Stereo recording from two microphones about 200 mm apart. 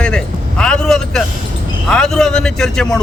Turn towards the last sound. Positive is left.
turn(degrees=5)  # may be behind; listen again after turning